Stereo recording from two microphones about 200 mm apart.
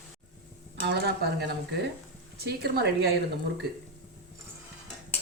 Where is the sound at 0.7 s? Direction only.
60° right (ahead or behind).